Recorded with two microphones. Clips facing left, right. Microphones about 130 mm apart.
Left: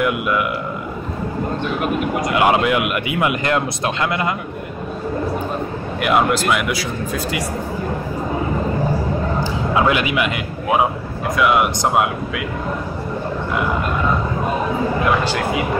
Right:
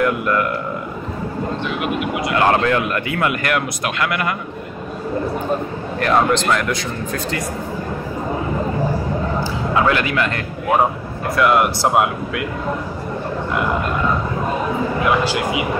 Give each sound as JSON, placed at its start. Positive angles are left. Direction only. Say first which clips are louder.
{"t": 0.0, "sound": "speech", "louder": "right 1 dB", "side_deg": 5}
{"t": 1.8, "sound": "speech", "louder": "left 2 dB", "side_deg": 45}
{"t": 2.3, "sound": "speech", "louder": "even", "side_deg": 15}
{"t": 5.9, "sound": "speech", "louder": "right 1 dB", "side_deg": 10}
{"t": 9.4, "sound": "a man's voice", "louder": "left 1 dB", "side_deg": 15}
{"t": 15.0, "sound": "a man's voice", "louder": "even", "side_deg": -5}